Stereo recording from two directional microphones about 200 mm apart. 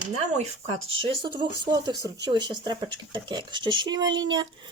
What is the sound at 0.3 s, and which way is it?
Speech, 35° right (ahead or behind).